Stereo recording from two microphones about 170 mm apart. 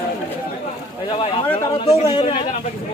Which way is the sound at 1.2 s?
35° left (ahead or behind).